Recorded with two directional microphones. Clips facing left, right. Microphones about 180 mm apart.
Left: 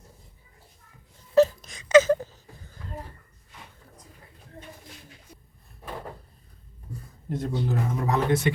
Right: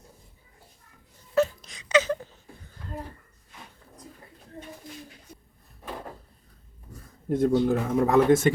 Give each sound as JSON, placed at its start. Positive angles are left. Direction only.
{"t": 1.4, "sound": "wail", "side_deg": 45}
{"t": 7.3, "sound": "speech", "side_deg": -55}